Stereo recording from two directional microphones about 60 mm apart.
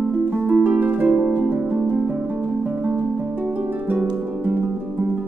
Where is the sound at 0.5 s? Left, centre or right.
Right.